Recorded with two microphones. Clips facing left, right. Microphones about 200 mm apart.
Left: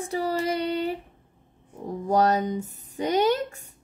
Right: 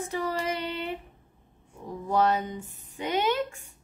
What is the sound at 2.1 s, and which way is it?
Speech, 40° left (ahead or behind).